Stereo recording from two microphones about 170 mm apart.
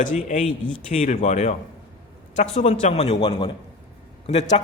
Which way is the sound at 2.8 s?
40° left (ahead or behind).